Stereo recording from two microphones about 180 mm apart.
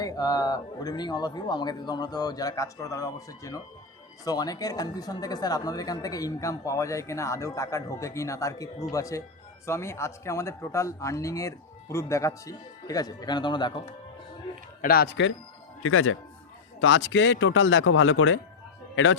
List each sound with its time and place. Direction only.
0.0 s speech: 20° left (ahead or behind)
14.8 s speech: 55° left (ahead or behind)
16.8 s speech: 90° left